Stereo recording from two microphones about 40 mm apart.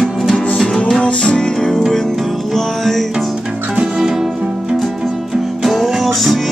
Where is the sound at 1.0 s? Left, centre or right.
Left.